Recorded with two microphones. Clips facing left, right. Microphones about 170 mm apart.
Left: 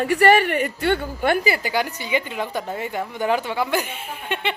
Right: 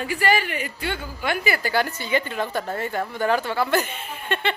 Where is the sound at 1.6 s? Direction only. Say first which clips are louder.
Even; 15° left (ahead or behind).